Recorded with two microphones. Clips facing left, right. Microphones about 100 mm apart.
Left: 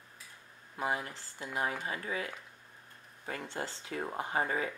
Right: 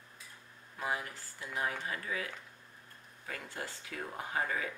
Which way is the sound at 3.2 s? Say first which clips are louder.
Left 4 dB; 30° left (ahead or behind).